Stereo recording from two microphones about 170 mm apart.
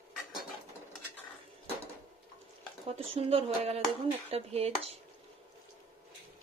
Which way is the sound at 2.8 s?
35° right (ahead or behind).